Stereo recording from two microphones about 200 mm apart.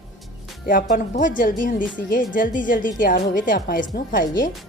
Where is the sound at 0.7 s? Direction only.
45° left (ahead or behind).